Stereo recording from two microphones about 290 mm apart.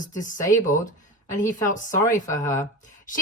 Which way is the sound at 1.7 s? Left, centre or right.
Left.